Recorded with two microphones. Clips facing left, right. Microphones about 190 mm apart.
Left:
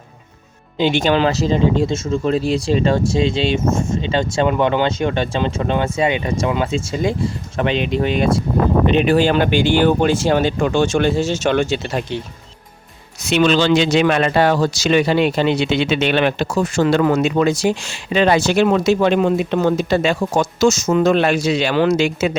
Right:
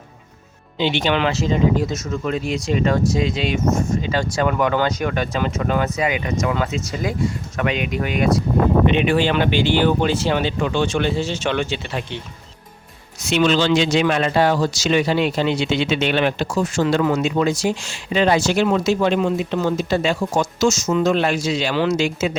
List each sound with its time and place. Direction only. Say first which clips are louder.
0.8 s speech: left 4 dB; 45° left (ahead or behind); by 8.3 s 30° left (ahead or behind)
8.9 s speech: left 3 dB; 40° left (ahead or behind)
13.2 s speech: left 2 dB; 60° left (ahead or behind)